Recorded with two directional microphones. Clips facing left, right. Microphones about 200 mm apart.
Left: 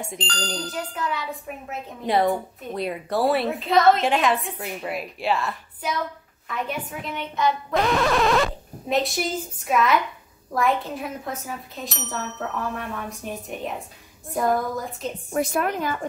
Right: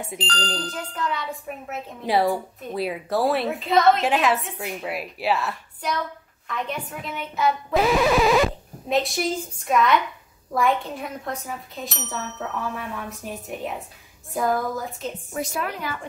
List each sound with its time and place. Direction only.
0.0 s speech: centre (ahead or behind)
15.3 s a woman's voice: 55° left (ahead or behind)